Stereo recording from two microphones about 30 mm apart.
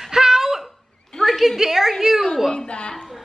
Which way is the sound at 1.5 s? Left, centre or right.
Centre.